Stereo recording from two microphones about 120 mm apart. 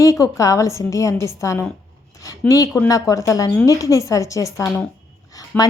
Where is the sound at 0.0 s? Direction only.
30° left (ahead or behind).